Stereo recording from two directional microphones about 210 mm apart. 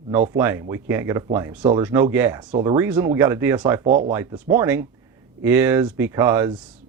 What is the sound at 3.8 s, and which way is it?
Speech, 35° right (ahead or behind).